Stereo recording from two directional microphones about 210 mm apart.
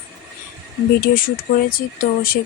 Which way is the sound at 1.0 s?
45° left (ahead or behind).